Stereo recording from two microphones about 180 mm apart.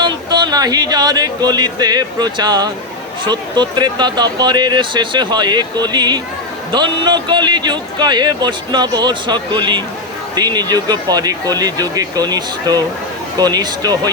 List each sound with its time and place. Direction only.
0.0 s a man's voice: 25° right (ahead or behind)